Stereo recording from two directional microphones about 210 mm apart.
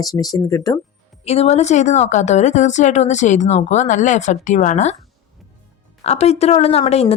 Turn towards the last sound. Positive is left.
turn(degrees=30)  # may be behind; listen again after turning